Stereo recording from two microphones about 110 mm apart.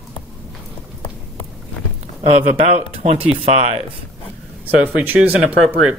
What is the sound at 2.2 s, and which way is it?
Speech, 80° right.